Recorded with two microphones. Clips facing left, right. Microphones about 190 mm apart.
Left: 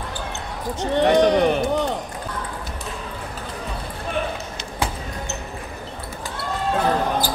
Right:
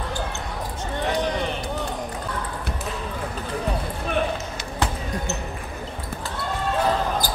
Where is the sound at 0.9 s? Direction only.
70° left (ahead or behind).